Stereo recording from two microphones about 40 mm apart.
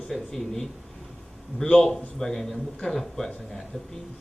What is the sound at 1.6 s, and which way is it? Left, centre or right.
A woman's voice, centre.